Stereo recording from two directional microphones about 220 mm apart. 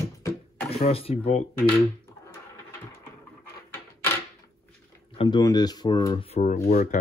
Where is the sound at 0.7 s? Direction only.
25° left (ahead or behind).